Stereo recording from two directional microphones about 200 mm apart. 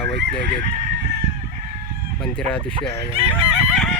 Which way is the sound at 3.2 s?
25° right (ahead or behind).